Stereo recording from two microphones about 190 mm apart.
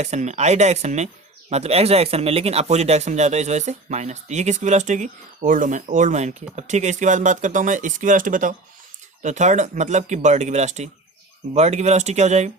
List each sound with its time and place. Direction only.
0.0 s speech: 35° right (ahead or behind)